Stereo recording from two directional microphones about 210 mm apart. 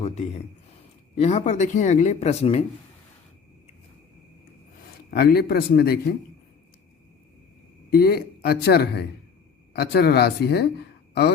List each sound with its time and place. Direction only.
0.0 s a man's voice: 30° left (ahead or behind)
5.1 s speech: 50° left (ahead or behind)
7.9 s speech: 45° left (ahead or behind)